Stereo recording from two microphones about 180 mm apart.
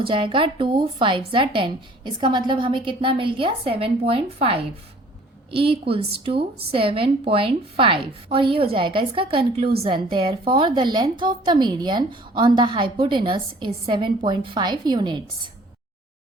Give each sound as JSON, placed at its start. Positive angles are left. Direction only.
{"t": 0.0, "sound": "a woman's voice", "side_deg": -30}